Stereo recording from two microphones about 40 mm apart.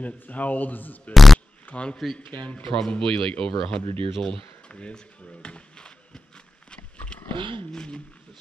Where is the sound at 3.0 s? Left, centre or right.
Left.